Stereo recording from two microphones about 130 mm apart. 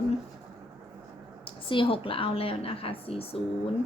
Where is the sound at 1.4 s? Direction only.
40° left (ahead or behind).